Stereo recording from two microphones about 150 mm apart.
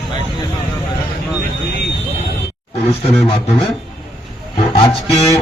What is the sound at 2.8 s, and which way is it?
Speech, 40° left (ahead or behind).